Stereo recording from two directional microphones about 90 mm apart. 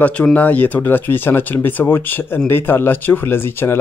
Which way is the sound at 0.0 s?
15° left (ahead or behind).